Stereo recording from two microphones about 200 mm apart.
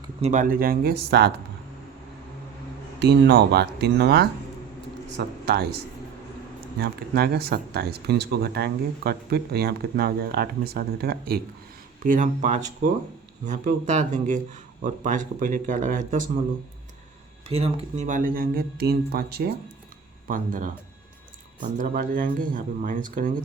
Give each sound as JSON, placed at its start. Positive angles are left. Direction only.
{"t": 0.2, "sound": "speech", "side_deg": -35}
{"t": 3.0, "sound": "speech", "side_deg": -55}
{"t": 12.0, "sound": "speech", "side_deg": -40}
{"t": 17.5, "sound": "speech", "side_deg": -30}